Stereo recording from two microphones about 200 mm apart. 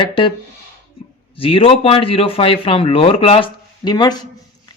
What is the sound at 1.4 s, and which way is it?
Speech, 25° left (ahead or behind).